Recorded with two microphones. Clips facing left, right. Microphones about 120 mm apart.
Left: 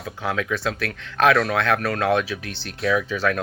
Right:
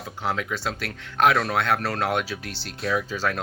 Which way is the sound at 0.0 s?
30° right (ahead or behind).